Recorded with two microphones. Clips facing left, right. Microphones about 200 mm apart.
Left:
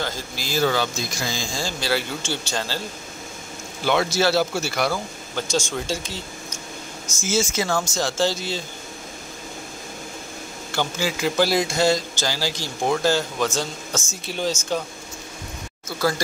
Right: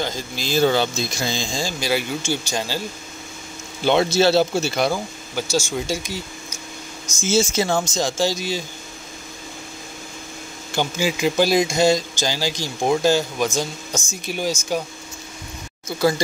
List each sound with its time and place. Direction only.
0.0 s a man's voice: 20° right (ahead or behind)
3.8 s a man's voice: 25° right (ahead or behind)
5.3 s speech: 5° right (ahead or behind)
7.2 s a man's voice: 25° right (ahead or behind)
10.7 s a man's voice: 15° right (ahead or behind)